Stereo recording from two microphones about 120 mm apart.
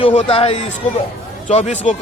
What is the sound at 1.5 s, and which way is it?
Speech, 75° left (ahead or behind).